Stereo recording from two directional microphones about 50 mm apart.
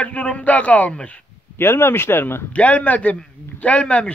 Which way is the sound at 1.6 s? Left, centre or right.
Left.